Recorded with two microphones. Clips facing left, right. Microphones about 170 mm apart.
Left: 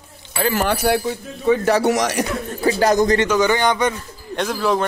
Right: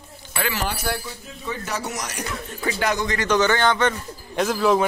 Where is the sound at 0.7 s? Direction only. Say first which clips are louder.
Left 10 dB; 65° left (ahead or behind).